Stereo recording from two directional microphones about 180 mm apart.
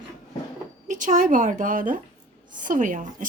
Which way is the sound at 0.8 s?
45° right (ahead or behind).